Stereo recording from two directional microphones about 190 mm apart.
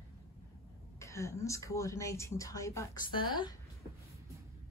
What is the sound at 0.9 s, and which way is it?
Speech, 15° left (ahead or behind).